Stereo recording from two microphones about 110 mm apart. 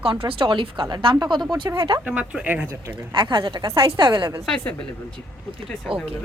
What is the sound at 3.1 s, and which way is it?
Speech, 45° right (ahead or behind).